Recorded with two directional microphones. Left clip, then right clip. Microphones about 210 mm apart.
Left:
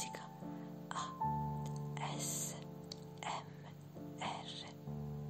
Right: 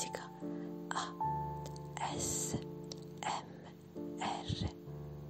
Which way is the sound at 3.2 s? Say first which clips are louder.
Right 4 dB; 20° right (ahead or behind).